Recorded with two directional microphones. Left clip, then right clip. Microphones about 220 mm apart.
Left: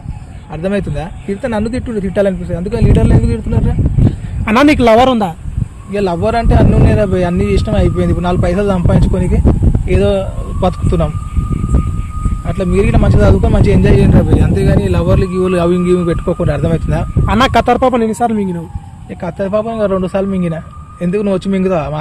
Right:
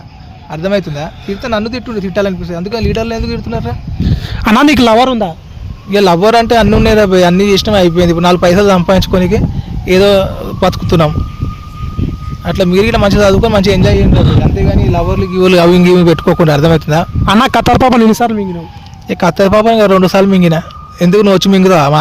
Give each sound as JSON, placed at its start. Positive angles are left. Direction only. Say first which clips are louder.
{"t": 0.5, "sound": "speech", "louder": "right 4 dB", "side_deg": -30}
{"t": 4.4, "sound": "a man's voice", "louder": "right 1 dB", "side_deg": -50}
{"t": 5.0, "sound": "speech", "louder": "even", "side_deg": 15}
{"t": 5.9, "sound": "a man's voice", "louder": "right 7 dB", "side_deg": -50}
{"t": 12.5, "sound": "a man's voice", "louder": "right 5 dB", "side_deg": -50}
{"t": 14.5, "sound": "speech", "louder": "right 1 dB", "side_deg": 10}
{"t": 15.4, "sound": "a man's voice", "louder": "right 10 dB", "side_deg": -55}